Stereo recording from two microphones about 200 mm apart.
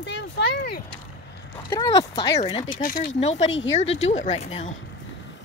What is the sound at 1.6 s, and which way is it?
Speech, 15° left (ahead or behind).